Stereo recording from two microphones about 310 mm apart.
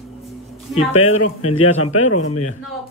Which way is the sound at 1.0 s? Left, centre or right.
Left.